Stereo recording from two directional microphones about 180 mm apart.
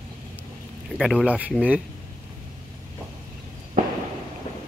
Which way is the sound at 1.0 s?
Centre (ahead or behind).